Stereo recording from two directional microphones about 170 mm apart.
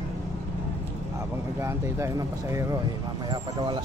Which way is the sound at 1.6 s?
15° right (ahead or behind).